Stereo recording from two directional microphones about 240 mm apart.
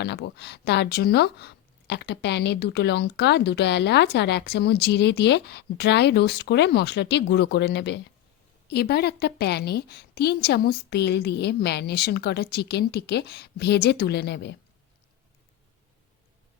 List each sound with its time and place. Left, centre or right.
0.0 s speech: left